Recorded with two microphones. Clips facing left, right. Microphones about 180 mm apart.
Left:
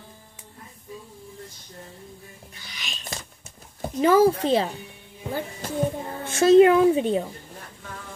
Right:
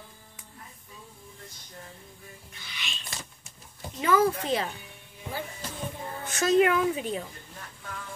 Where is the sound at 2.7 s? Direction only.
40° left (ahead or behind).